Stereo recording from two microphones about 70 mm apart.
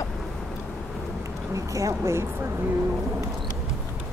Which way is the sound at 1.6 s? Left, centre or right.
Right.